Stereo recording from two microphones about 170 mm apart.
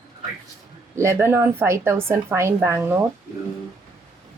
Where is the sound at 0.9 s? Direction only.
15° right (ahead or behind).